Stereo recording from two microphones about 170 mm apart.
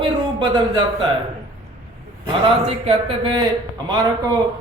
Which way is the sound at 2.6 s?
35° right (ahead or behind).